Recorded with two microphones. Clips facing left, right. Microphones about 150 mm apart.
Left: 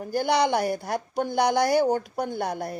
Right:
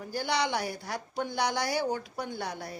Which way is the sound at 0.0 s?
50° left (ahead or behind).